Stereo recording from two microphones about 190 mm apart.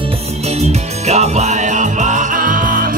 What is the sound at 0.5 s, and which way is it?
Music, 35° right (ahead or behind).